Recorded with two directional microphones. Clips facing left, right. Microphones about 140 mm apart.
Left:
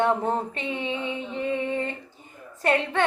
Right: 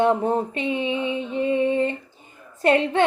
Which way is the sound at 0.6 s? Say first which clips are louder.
Right 5 dB; 15° right (ahead or behind).